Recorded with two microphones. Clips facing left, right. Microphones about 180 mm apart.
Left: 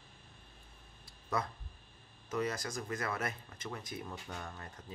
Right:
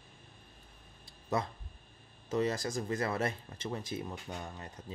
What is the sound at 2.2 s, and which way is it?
Speech, 25° right (ahead or behind).